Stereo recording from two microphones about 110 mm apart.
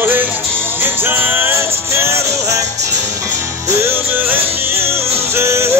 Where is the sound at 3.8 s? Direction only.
20° right (ahead or behind).